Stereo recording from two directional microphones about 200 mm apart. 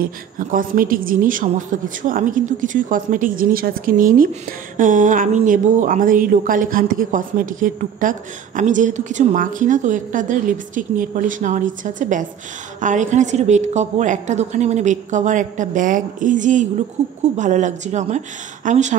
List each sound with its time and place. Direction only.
0.0 s a woman's voice: 45° right (ahead or behind)